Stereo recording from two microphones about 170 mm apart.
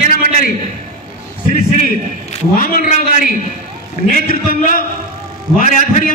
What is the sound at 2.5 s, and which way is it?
A man's voice, 55° left (ahead or behind).